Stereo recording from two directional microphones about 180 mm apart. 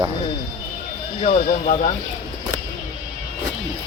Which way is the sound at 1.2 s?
40° left (ahead or behind).